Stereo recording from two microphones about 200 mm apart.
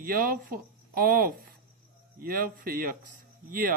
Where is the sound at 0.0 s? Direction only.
45° right (ahead or behind).